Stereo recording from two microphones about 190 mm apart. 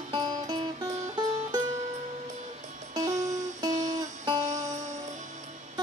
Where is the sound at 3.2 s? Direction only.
20° right (ahead or behind).